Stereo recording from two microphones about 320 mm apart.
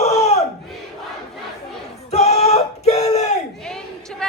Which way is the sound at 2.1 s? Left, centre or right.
Centre.